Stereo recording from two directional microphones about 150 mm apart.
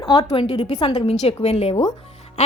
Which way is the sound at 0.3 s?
40° left (ahead or behind).